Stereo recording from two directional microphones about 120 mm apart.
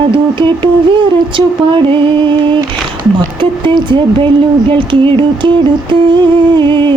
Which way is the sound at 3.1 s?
40° right (ahead or behind).